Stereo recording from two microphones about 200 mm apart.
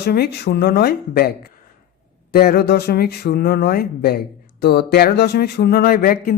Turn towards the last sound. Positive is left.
turn(degrees=50)  # may be behind; listen again after turning